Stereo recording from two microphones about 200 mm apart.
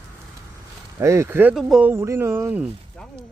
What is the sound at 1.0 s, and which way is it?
Speech, 15° right (ahead or behind).